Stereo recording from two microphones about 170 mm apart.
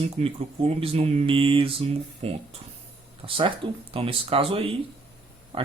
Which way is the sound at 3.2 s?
30° right (ahead or behind).